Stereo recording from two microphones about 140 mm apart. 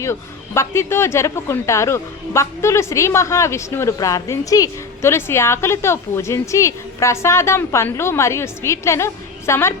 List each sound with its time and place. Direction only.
0.0 s a man's voice: 20° left (ahead or behind)